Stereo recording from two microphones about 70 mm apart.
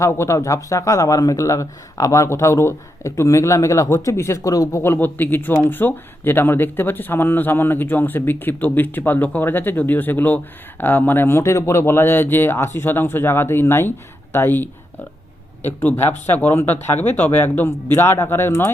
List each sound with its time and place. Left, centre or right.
0.0 s speech: left
4.8 s speech: left
17.7 s speech: left